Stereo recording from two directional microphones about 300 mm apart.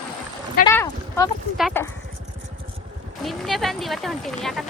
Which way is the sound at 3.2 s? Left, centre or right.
Centre.